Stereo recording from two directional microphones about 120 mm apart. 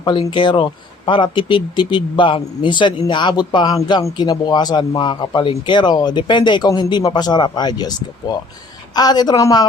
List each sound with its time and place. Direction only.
0.0 s speech: 45° left (ahead or behind)
6.7 s speech: 25° left (ahead or behind)
6.9 s speech: 35° left (ahead or behind)